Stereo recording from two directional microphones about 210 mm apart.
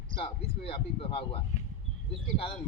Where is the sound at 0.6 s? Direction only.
25° left (ahead or behind).